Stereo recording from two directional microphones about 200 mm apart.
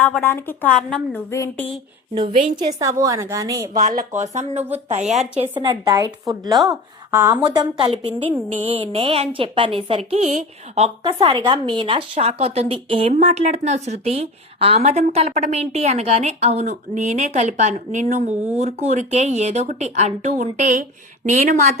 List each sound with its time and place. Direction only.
0.0 s speech: 10° left (ahead or behind)
2.1 s a woman's voice: 25° right (ahead or behind)
3.8 s a woman's voice: 40° right (ahead or behind)
5.4 s a woman's voice: 25° right (ahead or behind)